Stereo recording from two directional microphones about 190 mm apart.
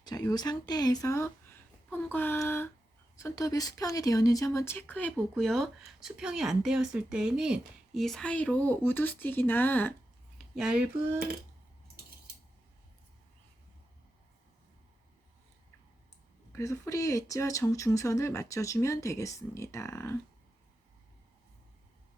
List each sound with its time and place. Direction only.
0.0 s speech: 20° left (ahead or behind)
10.3 s speech: 5° right (ahead or behind)
16.5 s speech: 15° left (ahead or behind)